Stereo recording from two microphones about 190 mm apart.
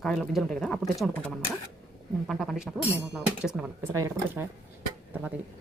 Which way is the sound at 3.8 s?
15° right (ahead or behind).